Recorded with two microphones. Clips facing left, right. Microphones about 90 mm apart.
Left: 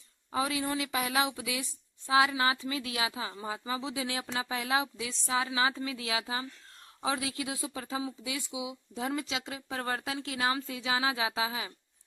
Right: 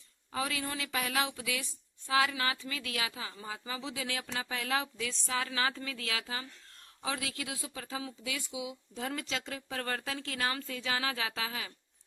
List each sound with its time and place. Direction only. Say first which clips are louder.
0.3 s speech: left 4 dB; 20° left (ahead or behind)